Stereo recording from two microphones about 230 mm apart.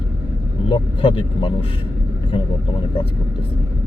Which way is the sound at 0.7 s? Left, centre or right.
Left.